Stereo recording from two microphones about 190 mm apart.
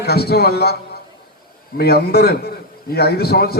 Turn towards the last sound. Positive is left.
turn(degrees=55)  # may be behind; listen again after turning